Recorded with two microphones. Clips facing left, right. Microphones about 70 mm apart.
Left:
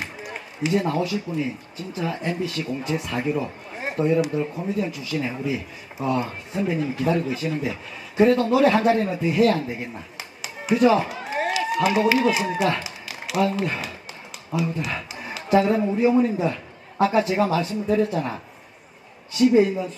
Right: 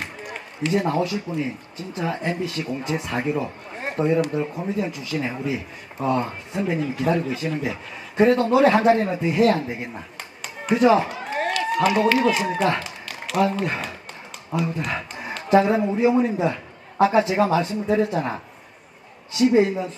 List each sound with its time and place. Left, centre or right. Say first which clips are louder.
0.0 s a man's voice: even; centre
10.2 s a sound: right 1 dB; centre
12.8 s a man's voice: right 1 dB; centre
17.8 s a man's voice: right 1 dB; centre
19.4 s speech: even; centre